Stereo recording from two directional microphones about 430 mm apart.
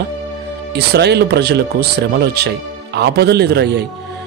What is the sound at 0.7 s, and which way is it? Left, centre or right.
Speech, right.